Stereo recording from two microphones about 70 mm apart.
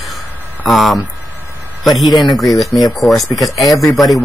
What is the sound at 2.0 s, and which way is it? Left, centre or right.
Speech, left.